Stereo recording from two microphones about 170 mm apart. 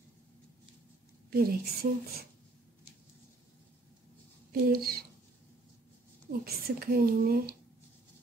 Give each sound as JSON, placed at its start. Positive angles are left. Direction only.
{"t": 1.3, "sound": "speech", "side_deg": -65}
{"t": 4.5, "sound": "speech", "side_deg": -60}
{"t": 6.4, "sound": "speech", "side_deg": -60}